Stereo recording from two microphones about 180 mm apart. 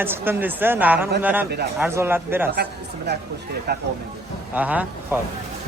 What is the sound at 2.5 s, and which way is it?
Speech, 65° right (ahead or behind).